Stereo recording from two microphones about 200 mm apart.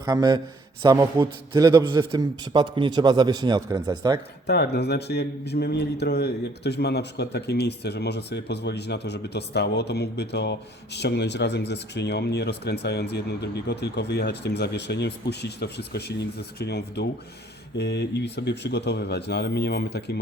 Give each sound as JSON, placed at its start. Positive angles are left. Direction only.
{"t": 0.0, "sound": "a man's voice", "side_deg": -20}
{"t": 4.4, "sound": "a man's voice", "side_deg": 55}